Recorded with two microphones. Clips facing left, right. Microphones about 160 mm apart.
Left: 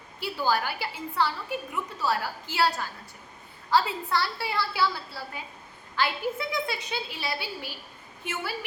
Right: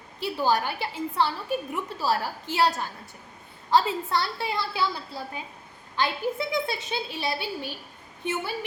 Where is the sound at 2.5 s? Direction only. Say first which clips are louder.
Right 2 dB; 20° right (ahead or behind).